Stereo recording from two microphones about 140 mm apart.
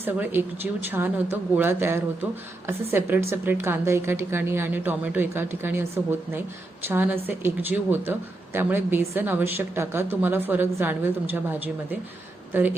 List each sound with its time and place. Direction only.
0.0 s speech: 15° right (ahead or behind)